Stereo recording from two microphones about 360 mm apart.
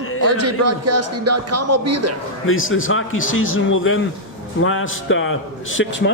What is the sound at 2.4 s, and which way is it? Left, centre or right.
A man's voice, left.